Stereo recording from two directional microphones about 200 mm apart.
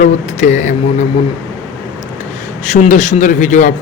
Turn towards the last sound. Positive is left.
turn(degrees=40)  # may be behind; listen again after turning